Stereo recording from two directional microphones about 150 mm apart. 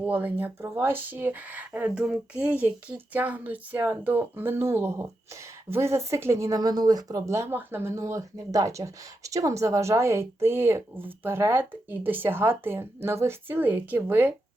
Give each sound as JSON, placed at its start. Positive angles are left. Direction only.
{"t": 0.0, "sound": "speech", "side_deg": -10}